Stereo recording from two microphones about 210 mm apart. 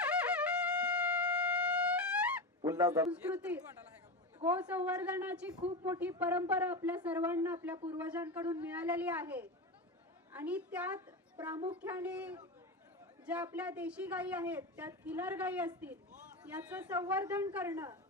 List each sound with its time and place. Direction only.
0.0 s wind instrument: 5° right (ahead or behind)
2.6 s a man's voice: 15° right (ahead or behind)